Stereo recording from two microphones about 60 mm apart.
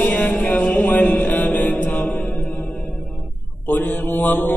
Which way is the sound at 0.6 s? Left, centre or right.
Left.